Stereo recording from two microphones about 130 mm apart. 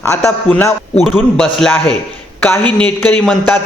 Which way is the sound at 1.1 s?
5° left (ahead or behind).